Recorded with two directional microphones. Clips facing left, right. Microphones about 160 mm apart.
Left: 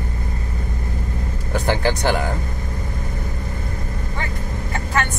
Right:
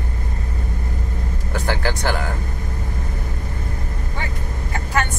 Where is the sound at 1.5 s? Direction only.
15° left (ahead or behind).